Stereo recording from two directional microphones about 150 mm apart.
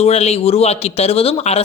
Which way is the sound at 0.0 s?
45° left (ahead or behind).